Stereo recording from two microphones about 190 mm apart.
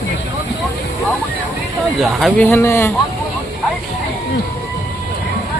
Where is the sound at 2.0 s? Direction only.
Centre (ahead or behind).